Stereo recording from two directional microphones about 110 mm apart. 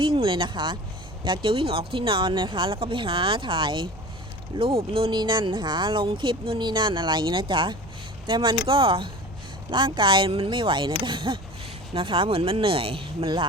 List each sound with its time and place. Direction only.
0.0 s speech: 50° right (ahead or behind)